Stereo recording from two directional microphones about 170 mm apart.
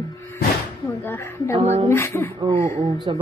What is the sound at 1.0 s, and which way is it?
Speech, 10° left (ahead or behind).